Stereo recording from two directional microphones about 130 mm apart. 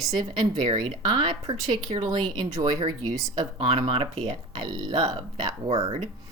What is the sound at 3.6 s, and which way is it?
Speech, 45° right (ahead or behind).